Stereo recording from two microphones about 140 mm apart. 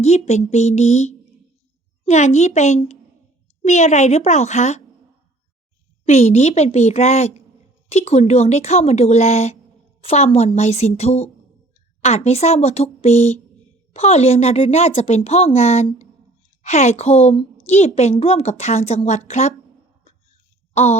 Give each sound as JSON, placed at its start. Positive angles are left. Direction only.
{"t": 0.0, "sound": "a woman's voice", "side_deg": 55}
{"t": 6.1, "sound": "a woman's voice", "side_deg": 50}